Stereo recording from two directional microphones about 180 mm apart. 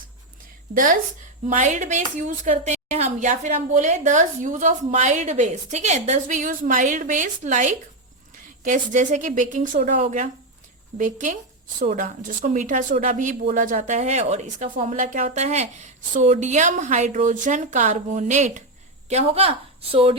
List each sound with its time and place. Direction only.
0.7 s a woman's voice: 50° right (ahead or behind); by 20.1 s 30° right (ahead or behind)